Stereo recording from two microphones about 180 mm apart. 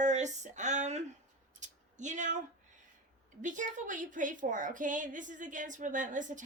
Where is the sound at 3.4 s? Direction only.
45° right (ahead or behind).